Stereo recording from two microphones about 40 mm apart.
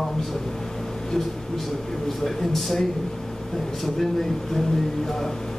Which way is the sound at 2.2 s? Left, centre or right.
Centre.